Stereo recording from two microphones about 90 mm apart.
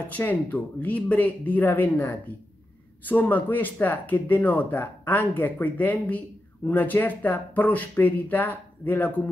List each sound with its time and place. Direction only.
0.1 s speech: 20° left (ahead or behind)